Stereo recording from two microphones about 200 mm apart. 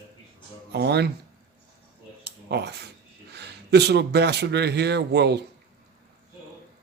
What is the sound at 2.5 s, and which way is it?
A man's voice, 55° right (ahead or behind).